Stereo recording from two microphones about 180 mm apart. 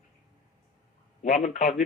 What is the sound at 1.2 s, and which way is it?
Speech, 40° left (ahead or behind).